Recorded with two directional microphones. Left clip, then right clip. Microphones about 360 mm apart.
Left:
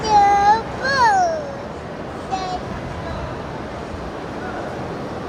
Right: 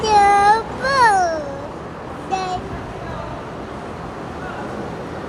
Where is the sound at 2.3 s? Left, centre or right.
Centre.